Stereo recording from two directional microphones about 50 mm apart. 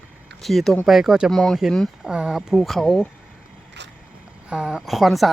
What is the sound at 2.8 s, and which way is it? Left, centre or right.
Speech, centre.